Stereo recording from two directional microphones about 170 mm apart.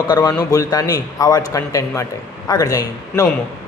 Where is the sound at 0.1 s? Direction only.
20° left (ahead or behind).